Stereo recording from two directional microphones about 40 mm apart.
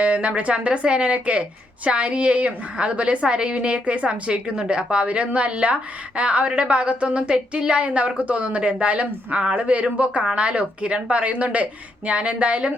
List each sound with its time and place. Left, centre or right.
0.0 s a woman's voice: right
9.6 s a woman's voice: right